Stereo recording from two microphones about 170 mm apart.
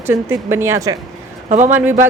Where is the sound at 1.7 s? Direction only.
10° right (ahead or behind).